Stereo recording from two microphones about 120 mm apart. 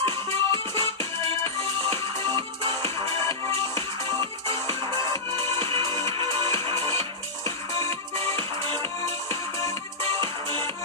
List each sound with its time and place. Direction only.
0.0 s music: 45° right (ahead or behind)
4.2 s music: 45° right (ahead or behind)
10.2 s music: 45° right (ahead or behind)